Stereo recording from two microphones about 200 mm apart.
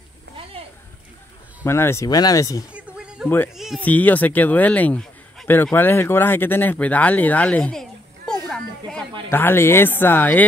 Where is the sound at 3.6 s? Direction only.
Centre (ahead or behind).